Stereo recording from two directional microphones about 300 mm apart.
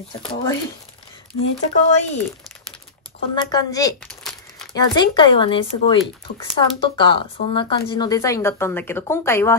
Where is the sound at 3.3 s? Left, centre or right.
Centre.